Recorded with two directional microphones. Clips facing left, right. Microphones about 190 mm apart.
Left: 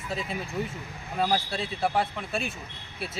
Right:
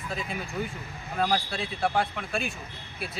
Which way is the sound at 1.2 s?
15° left (ahead or behind).